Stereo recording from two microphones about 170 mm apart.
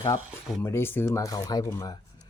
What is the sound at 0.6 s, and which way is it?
Speech, 15° left (ahead or behind).